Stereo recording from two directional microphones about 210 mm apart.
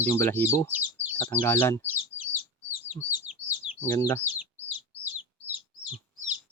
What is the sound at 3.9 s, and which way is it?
Speech, 15° left (ahead or behind).